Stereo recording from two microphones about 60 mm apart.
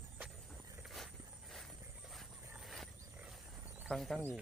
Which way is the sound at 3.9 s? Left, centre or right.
Centre.